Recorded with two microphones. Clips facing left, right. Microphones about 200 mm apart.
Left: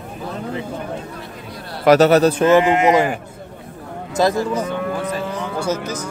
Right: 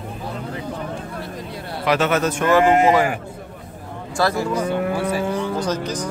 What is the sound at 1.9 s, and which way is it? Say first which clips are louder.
Speech: left 8 dB; 40° left (ahead or behind).